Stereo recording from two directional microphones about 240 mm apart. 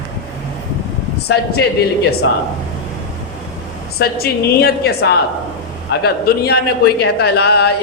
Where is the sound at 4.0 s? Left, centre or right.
Left.